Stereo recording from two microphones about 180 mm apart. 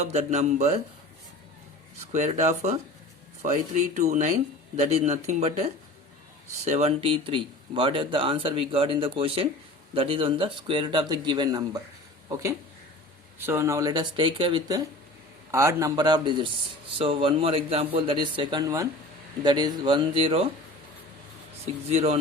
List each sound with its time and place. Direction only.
0.0 s speech: 35° right (ahead or behind)
2.1 s speech: 40° right (ahead or behind); by 11.8 s 20° right (ahead or behind)
13.4 s speech: 15° right (ahead or behind); by 20.5 s 30° right (ahead or behind)
21.8 s speech: 35° right (ahead or behind)